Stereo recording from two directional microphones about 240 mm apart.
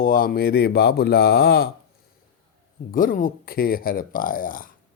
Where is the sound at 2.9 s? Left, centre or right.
Left.